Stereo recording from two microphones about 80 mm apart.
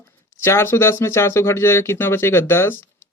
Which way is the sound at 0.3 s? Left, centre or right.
Left.